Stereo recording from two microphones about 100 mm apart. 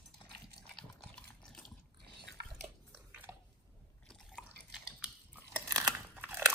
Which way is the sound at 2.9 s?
20° right (ahead or behind).